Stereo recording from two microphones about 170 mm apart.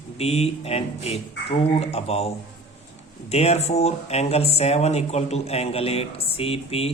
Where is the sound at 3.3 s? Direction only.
40° left (ahead or behind).